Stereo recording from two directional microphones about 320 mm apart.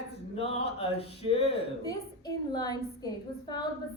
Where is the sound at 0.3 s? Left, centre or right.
Centre.